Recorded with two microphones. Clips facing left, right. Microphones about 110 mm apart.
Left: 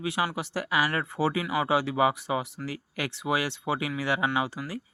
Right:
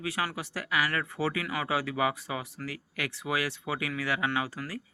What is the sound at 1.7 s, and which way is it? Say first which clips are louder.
Speech: left 4 dB; 25° left (ahead or behind).